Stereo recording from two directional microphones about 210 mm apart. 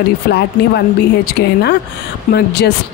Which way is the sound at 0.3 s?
50° left (ahead or behind).